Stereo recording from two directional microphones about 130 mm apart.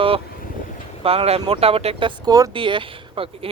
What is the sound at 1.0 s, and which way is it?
Speech, 50° right (ahead or behind).